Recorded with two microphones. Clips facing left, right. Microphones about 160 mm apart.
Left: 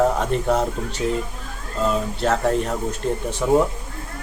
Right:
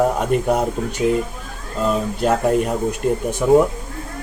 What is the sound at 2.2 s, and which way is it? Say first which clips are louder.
Speech: right 4 dB; 10° right (ahead or behind).